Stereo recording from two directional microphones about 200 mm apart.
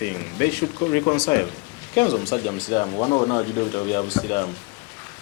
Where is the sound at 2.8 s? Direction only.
25° left (ahead or behind).